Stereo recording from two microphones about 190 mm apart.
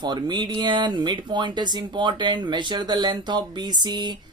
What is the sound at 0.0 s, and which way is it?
Speech, 25° right (ahead or behind).